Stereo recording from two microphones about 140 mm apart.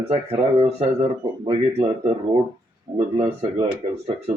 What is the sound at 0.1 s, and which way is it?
Speech, 45° right (ahead or behind).